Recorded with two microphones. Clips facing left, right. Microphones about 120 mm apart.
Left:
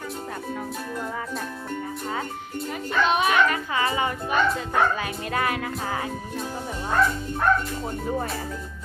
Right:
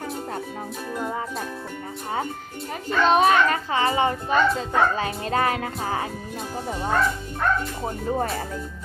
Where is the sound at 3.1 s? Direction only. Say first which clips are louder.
Right 4 dB; 35° right (ahead or behind).